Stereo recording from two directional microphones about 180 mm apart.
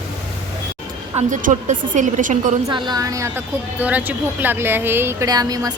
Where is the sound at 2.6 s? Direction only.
25° right (ahead or behind).